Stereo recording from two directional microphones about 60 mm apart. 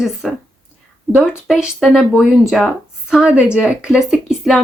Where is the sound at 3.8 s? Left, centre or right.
Centre.